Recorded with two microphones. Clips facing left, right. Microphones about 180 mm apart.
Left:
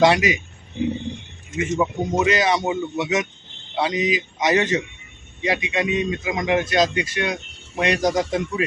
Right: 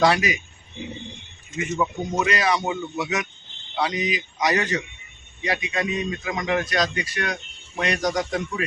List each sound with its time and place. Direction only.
0.0 s speech: 20° left (ahead or behind)
1.7 s speech: 20° left (ahead or behind)